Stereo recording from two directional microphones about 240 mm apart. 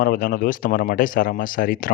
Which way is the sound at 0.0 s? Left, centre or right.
Left.